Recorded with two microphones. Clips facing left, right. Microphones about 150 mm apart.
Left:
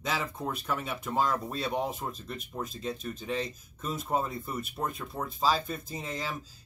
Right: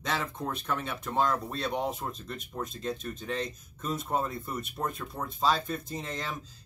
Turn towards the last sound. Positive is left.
turn(degrees=5)  # may be behind; listen again after turning